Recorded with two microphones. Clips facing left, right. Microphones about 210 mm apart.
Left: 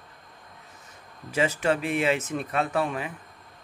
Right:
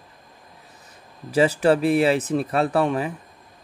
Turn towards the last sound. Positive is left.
turn(degrees=-35)  # may be behind; listen again after turning